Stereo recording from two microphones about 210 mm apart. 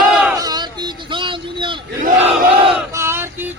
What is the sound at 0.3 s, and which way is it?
Vehicle, 20° right (ahead or behind).